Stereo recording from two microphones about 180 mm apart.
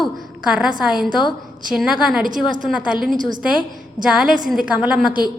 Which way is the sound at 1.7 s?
5° right (ahead or behind).